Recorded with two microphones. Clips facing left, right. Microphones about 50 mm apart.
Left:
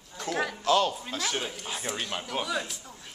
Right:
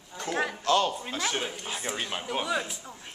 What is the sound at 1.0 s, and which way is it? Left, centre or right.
Speech, centre.